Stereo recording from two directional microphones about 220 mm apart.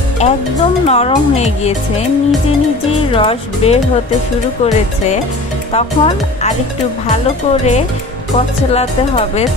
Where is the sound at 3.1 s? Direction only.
25° left (ahead or behind).